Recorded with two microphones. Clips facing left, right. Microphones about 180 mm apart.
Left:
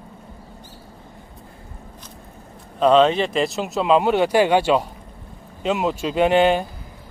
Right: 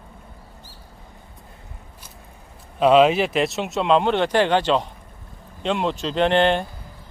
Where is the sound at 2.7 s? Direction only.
5° right (ahead or behind).